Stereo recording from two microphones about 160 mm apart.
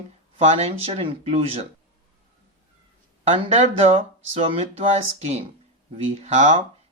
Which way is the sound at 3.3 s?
35° right (ahead or behind).